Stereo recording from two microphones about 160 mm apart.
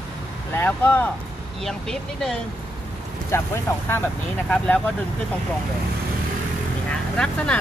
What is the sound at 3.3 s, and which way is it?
Speech, 15° left (ahead or behind).